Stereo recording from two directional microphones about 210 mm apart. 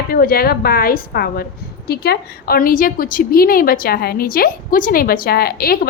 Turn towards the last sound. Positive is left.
turn(degrees=45)  # may be behind; listen again after turning